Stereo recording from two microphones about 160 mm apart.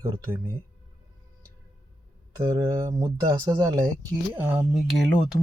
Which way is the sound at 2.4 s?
20° right (ahead or behind).